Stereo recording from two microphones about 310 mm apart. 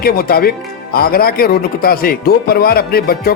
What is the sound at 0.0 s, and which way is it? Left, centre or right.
Speech, left.